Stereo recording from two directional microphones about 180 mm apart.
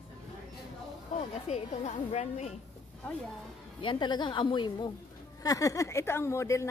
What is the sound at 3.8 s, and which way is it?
A woman's voice, 25° left (ahead or behind).